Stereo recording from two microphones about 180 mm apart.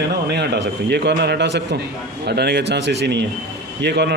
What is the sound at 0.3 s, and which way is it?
Speech, 70° right (ahead or behind).